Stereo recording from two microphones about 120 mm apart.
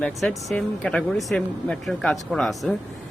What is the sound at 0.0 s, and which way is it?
Speech, 10° left (ahead or behind).